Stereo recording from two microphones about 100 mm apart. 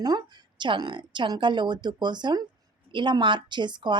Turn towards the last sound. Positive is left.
turn(degrees=-50)  # may be behind; listen again after turning